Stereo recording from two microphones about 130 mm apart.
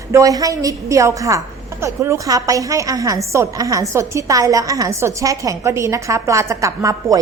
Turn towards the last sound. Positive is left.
turn(degrees=-25)  # may be behind; listen again after turning